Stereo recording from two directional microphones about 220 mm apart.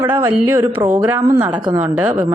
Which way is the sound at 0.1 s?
10° right (ahead or behind).